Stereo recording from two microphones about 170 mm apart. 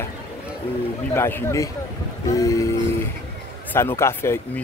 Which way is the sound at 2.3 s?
20° left (ahead or behind).